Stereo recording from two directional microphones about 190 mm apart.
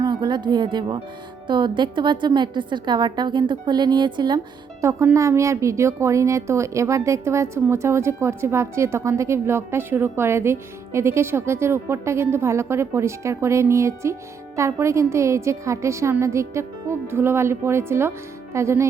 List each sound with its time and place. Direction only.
0.0 s a woman's voice: 20° right (ahead or behind)